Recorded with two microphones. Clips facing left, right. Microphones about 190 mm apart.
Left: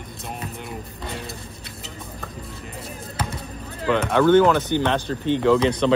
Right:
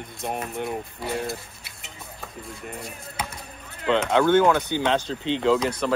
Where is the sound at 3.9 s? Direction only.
15° right (ahead or behind).